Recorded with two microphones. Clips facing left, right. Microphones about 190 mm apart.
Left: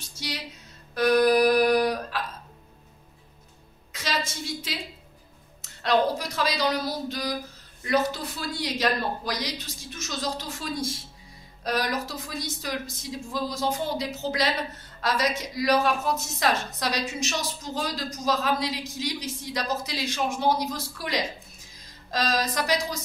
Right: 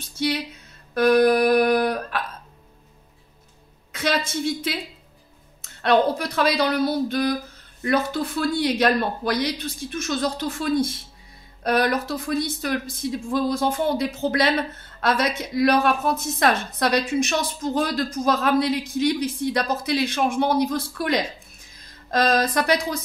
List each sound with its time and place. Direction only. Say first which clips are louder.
0.0 s speech: right 11 dB; 55° right (ahead or behind)
0.9 s music: right 3 dB; 55° right (ahead or behind)
3.9 s a woman's voice: right 7 dB; 55° right (ahead or behind)